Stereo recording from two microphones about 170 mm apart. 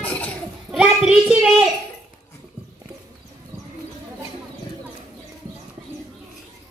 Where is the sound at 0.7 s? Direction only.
5° right (ahead or behind).